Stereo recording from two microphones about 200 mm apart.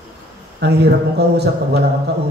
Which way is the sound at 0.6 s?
55° right (ahead or behind).